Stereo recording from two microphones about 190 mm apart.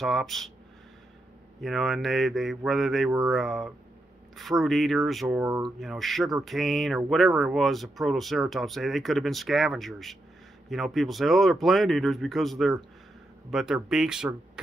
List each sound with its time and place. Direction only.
0.0 s speech: centre (ahead or behind)
1.6 s speech: centre (ahead or behind)
5.4 s speech: 15° right (ahead or behind)
5.8 s speech: centre (ahead or behind)